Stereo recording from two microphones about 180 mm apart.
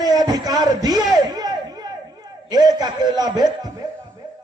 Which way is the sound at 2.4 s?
20° right (ahead or behind).